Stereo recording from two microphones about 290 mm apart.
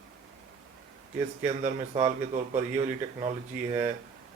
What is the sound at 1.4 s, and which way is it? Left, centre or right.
Speech, right.